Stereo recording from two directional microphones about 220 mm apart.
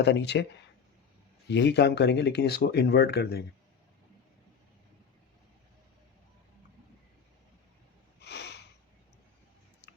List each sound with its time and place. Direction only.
0.0 s speech: 50° left (ahead or behind)
1.5 s speech: 50° left (ahead or behind)
8.2 s a sound: 50° left (ahead or behind)